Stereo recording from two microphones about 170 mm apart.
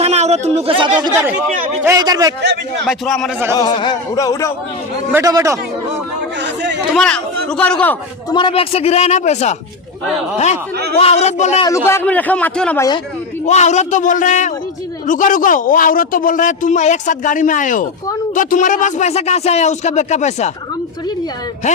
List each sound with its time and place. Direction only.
0.0 s speech: 40° right (ahead or behind); by 2.3 s 20° right (ahead or behind)
2.4 s a man's voice: 90° right
2.8 s a man's voice: centre (ahead or behind)
3.5 s a man's voice: 25° left (ahead or behind)
5.1 s speech: 20° right (ahead or behind)
6.4 s chatter: 90° right
6.9 s a man's voice: 5° left (ahead or behind)
8.3 s a man's voice: 30° left (ahead or behind)
11.9 s a man's voice: 10° left (ahead or behind)
13.4 s a man's voice: 40° left (ahead or behind)